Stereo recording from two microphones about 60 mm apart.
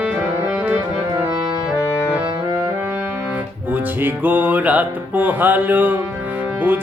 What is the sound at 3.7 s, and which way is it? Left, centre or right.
Music, right.